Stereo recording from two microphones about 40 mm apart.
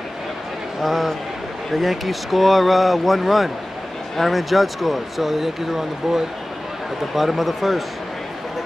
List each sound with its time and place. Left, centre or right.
0.8 s speech: centre